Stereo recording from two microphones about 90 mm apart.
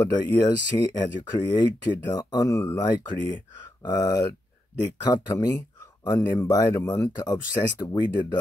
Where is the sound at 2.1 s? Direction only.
40° left (ahead or behind).